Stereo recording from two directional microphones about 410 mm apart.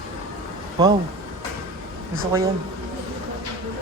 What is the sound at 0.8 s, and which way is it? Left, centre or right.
Speech, centre.